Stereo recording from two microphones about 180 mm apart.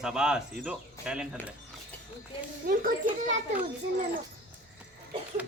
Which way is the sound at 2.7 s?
55° right (ahead or behind).